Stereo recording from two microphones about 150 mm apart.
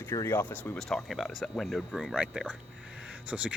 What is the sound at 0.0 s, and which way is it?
Speech, 20° left (ahead or behind).